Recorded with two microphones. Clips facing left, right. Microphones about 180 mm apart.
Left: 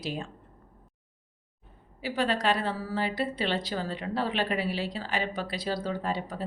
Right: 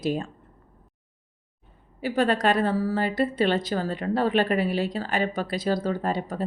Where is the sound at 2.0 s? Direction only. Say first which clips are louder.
Right 5 dB; 50° right (ahead or behind).